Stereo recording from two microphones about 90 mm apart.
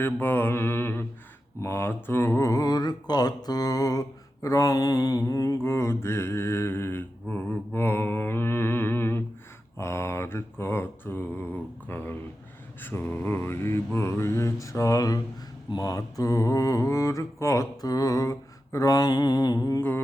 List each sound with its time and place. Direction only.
0.0 s mantra: 25° left (ahead or behind)
1.6 s speech: 25° left (ahead or behind); by 4.0 s 45° left (ahead or behind)
4.4 s mantra: 40° left (ahead or behind)
5.5 s mantra: 30° left (ahead or behind)